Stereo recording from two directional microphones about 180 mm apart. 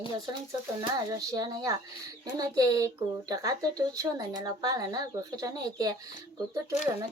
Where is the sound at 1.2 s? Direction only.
20° right (ahead or behind).